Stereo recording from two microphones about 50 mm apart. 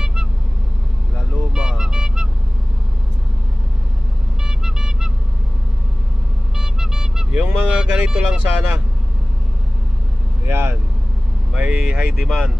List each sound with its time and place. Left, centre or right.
0.0 s vehicle: centre
4.5 s vehicle: centre
6.6 s vehicle: centre
7.6 s speech: right
10.4 s speech: right
11.5 s speech: right